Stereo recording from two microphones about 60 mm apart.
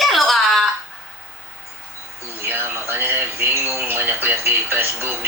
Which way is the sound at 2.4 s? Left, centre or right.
Right.